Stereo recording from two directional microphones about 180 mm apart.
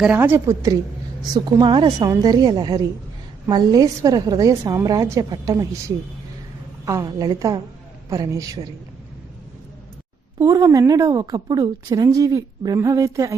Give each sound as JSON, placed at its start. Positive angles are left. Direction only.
{"t": 0.0, "sound": "a woman's voice", "side_deg": -10}
{"t": 6.8, "sound": "a woman's voice", "side_deg": -20}
{"t": 10.3, "sound": "a woman's voice", "side_deg": -20}